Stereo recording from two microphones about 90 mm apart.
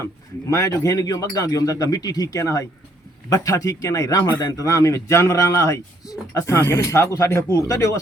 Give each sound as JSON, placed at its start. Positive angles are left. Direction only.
{"t": 0.5, "sound": "speech", "side_deg": 35}